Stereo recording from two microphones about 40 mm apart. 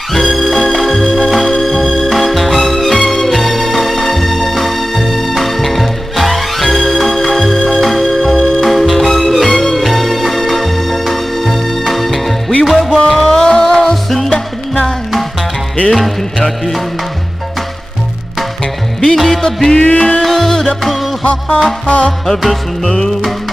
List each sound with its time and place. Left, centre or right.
0.3 s music: centre
13.4 s music: centre
19.1 s music: centre
19.4 s music: centre
21.2 s music: left
22.2 s music: centre